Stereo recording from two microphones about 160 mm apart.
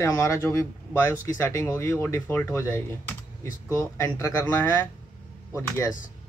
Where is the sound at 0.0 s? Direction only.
20° left (ahead or behind).